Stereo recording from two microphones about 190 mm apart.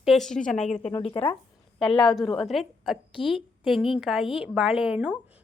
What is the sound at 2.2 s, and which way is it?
Speech, 25° left (ahead or behind).